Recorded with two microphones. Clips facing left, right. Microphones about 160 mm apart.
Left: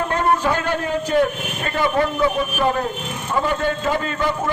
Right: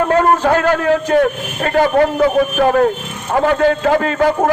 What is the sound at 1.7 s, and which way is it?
A man's voice, 50° right (ahead or behind).